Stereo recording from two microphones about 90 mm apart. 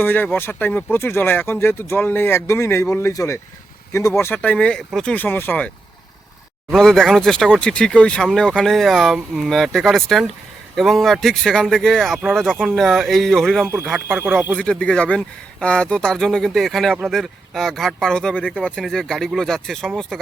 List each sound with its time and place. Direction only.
0.0 s speech: 20° left (ahead or behind)
4.4 s speech: 15° left (ahead or behind)
6.7 s speech: 5° left (ahead or behind)
14.1 s speech: 20° right (ahead or behind)
14.6 s speech: 10° left (ahead or behind)